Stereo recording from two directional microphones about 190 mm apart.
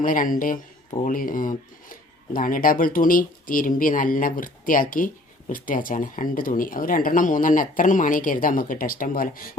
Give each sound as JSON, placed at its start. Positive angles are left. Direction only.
{"t": 0.0, "sound": "speech", "side_deg": 45}